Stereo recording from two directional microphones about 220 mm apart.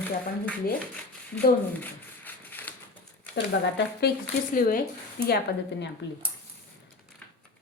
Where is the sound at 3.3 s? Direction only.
50° left (ahead or behind).